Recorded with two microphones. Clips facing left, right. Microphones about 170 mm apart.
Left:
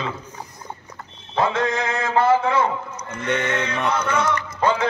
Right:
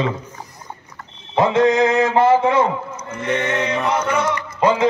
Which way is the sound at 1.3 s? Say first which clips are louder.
Right 7 dB; 20° right (ahead or behind).